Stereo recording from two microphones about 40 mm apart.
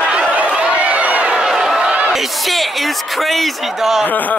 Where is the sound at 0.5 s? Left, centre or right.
Right.